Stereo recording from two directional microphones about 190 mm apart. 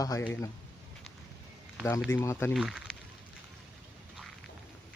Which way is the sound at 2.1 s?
10° left (ahead or behind).